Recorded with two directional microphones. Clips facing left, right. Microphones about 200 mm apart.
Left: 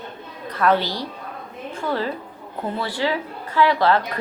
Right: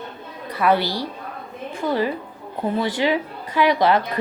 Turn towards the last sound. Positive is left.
turn(degrees=-15)  # may be behind; listen again after turning